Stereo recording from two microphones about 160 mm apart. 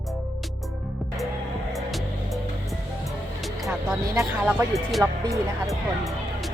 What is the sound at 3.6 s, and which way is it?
Speech, 15° right (ahead or behind).